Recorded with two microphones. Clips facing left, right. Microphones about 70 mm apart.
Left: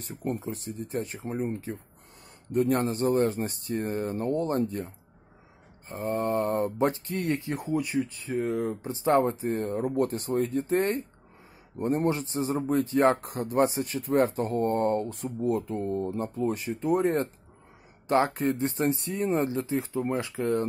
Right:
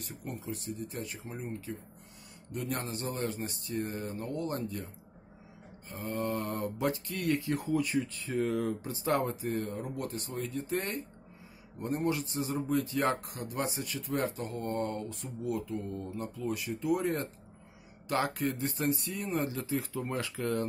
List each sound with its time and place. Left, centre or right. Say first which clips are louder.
0.3 s a man's voice: left 6 dB; left